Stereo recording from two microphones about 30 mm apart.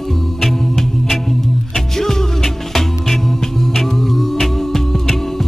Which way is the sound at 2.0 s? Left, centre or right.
Centre.